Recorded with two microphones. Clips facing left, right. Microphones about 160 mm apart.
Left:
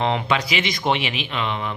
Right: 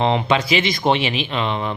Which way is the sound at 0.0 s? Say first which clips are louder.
Right 4 dB; 25° right (ahead or behind).